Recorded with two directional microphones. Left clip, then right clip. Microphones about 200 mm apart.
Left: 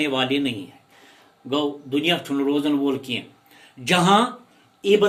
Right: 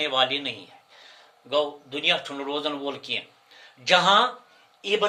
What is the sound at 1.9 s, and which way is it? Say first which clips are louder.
Speech: left 2 dB; 10° right (ahead or behind).